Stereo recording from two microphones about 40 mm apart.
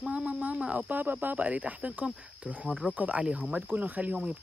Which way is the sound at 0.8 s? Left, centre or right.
Right.